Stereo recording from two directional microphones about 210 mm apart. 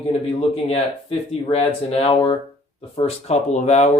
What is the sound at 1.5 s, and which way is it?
Speech, 30° left (ahead or behind).